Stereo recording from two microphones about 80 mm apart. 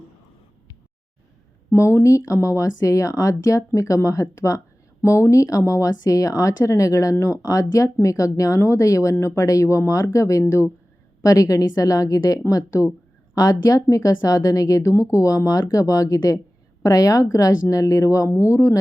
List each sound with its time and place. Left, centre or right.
2.0 s speech: left